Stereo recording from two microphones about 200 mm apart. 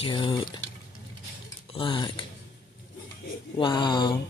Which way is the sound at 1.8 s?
25° left (ahead or behind).